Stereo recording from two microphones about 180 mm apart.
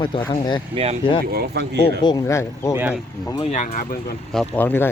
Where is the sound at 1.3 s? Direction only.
60° right (ahead or behind).